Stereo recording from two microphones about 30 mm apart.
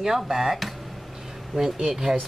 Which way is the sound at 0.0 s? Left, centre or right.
Centre.